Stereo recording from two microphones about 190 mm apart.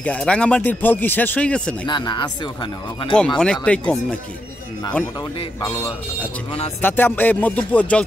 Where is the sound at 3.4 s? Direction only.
5° left (ahead or behind).